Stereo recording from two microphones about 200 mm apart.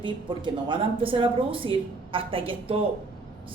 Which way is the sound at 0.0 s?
25° right (ahead or behind).